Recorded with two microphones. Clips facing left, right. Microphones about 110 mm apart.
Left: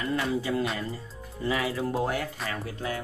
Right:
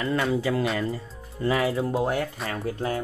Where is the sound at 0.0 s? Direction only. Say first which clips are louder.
Right 4 dB; 85° right.